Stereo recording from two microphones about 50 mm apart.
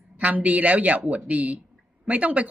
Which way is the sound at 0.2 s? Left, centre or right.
Right.